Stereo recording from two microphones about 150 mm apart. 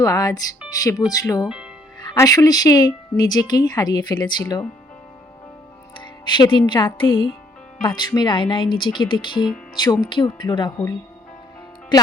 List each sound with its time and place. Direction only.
0.0 s a woman's voice: 25° left (ahead or behind)
1.5 s speech: 5° right (ahead or behind)
2.0 s a woman's voice: 25° left (ahead or behind)
6.0 s speech: 30° left (ahead or behind)
11.9 s a woman's voice: 30° left (ahead or behind)